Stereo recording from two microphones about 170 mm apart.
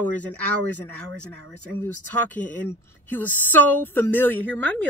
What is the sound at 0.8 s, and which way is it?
Speech, 5° left (ahead or behind).